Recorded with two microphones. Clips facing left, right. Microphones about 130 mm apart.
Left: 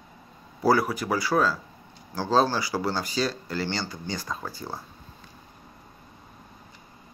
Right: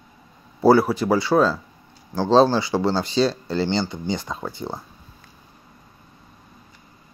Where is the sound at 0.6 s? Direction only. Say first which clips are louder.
Right 7 dB; 25° right (ahead or behind).